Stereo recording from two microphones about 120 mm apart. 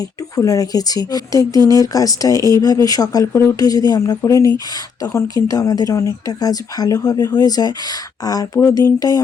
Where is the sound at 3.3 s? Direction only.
20° left (ahead or behind).